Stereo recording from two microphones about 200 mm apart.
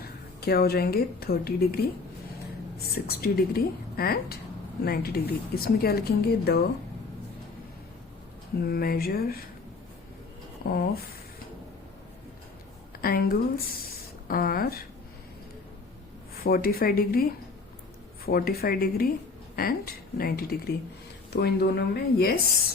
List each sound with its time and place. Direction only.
0.0 s a woman's voice: 50° left (ahead or behind)
2.9 s speech: 50° left (ahead or behind)
8.6 s speech: 50° left (ahead or behind)
10.7 s speech: 50° left (ahead or behind)
13.0 s speech: 50° left (ahead or behind)
16.4 s speech: 50° left (ahead or behind)
18.3 s speech: 50° left (ahead or behind)